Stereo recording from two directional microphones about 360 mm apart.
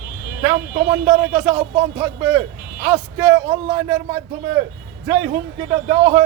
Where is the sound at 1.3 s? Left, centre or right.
Centre.